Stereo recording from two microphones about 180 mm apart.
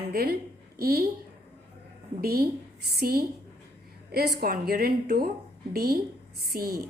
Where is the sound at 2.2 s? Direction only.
55° right (ahead or behind).